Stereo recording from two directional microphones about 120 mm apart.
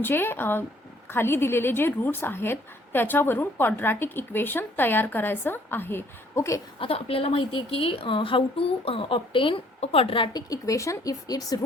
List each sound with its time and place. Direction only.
0.0 s a woman's voice: 20° left (ahead or behind)
6.7 s a woman's voice: 50° left (ahead or behind)
10.3 s speech: 30° left (ahead or behind)